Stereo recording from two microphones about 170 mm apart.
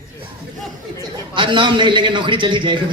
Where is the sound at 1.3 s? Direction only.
30° right (ahead or behind).